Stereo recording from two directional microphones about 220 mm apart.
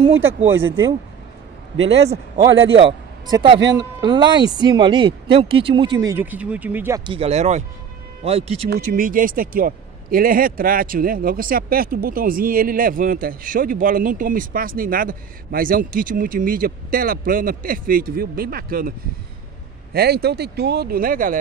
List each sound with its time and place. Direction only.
0.6 s speech: 10° right (ahead or behind)
2.7 s a man's voice: 20° right (ahead or behind)
7.1 s speech: 25° right (ahead or behind)
8.6 s a man's voice: 40° right (ahead or behind)